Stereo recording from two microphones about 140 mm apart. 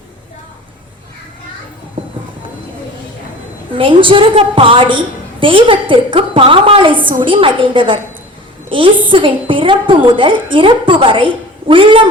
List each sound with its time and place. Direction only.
3.8 s a woman's voice: 35° right (ahead or behind)
9.0 s a woman's voice: 35° right (ahead or behind)